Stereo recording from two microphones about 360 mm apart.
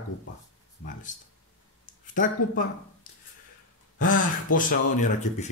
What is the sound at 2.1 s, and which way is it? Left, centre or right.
Speech, left.